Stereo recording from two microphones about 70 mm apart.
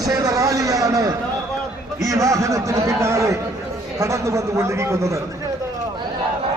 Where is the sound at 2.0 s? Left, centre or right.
Right.